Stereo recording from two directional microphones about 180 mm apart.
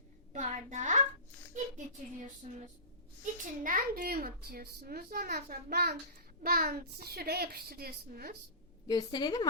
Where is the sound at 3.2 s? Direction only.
50° right (ahead or behind).